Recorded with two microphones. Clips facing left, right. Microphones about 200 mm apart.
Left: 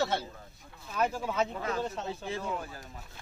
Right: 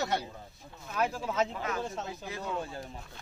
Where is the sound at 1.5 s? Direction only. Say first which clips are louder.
Left 1 dB; 30° left (ahead or behind).